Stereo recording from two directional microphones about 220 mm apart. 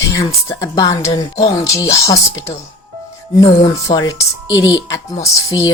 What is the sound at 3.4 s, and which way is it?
Speech, 20° left (ahead or behind).